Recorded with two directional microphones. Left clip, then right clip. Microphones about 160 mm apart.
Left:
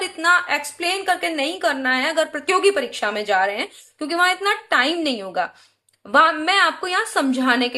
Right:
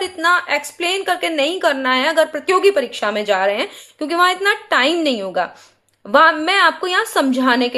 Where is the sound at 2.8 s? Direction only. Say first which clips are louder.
Right 4 dB; 35° right (ahead or behind).